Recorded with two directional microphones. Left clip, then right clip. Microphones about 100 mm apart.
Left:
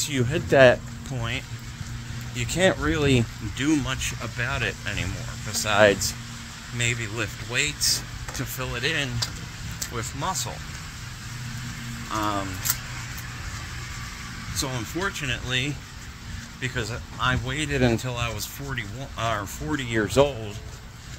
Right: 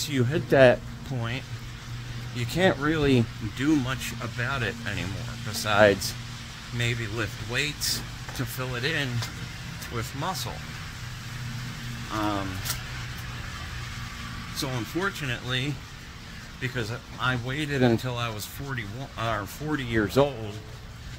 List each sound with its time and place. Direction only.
0.0 s speech: 35° right (ahead or behind)
4.2 s speech: 30° right (ahead or behind)
12.1 s speech: 25° right (ahead or behind)
14.6 s speech: 30° right (ahead or behind)